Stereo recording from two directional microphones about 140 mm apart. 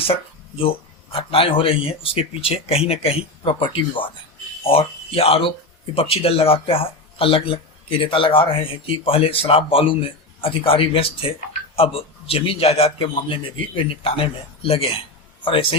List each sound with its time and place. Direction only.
1.1 s a man's voice: 40° left (ahead or behind)